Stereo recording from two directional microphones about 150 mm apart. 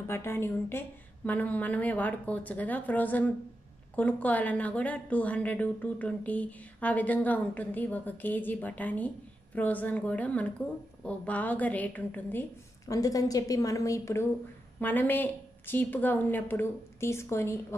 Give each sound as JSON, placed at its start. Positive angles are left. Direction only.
{"t": 0.0, "sound": "a woman's voice", "side_deg": 15}